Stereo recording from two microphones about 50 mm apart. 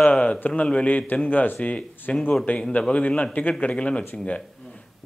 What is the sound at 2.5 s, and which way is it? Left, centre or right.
Speech, left.